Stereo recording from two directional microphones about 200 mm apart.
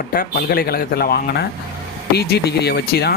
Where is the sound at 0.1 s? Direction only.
45° left (ahead or behind).